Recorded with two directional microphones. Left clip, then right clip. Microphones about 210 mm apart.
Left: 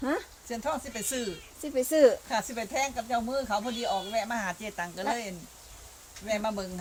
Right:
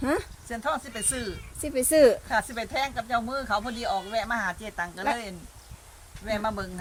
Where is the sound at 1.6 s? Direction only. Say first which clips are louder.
Right 3 dB; 50° right (ahead or behind).